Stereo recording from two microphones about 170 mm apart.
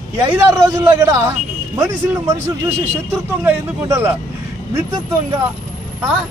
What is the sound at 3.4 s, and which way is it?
Speech, 15° right (ahead or behind).